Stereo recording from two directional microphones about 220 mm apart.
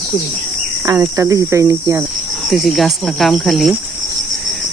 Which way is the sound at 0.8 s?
15° right (ahead or behind).